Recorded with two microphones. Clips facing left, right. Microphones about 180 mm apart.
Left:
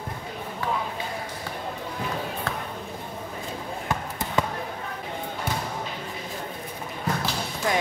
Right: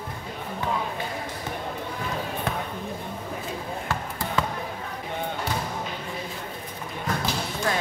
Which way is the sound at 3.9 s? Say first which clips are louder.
Left 2 dB; 20° left (ahead or behind).